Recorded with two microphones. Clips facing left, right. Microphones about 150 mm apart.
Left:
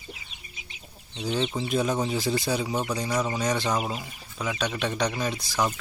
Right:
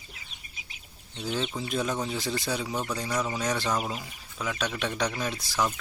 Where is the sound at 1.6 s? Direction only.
5° left (ahead or behind).